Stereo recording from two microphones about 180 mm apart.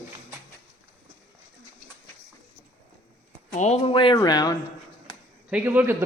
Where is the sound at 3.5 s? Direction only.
40° left (ahead or behind); by 4.5 s 20° left (ahead or behind).